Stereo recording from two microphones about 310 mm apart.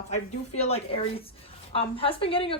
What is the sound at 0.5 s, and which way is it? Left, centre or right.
A woman's voice, centre.